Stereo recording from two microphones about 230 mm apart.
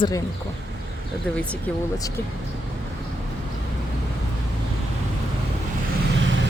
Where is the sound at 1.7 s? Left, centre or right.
Centre.